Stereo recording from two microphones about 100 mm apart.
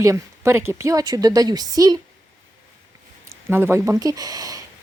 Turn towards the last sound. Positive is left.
turn(degrees=-40)  # may be behind; listen again after turning